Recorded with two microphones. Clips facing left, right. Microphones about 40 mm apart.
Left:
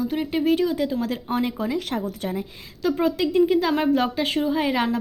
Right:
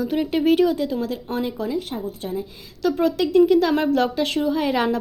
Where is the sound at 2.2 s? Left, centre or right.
Left.